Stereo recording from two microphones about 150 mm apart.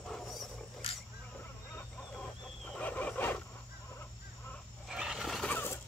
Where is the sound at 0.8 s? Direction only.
35° left (ahead or behind).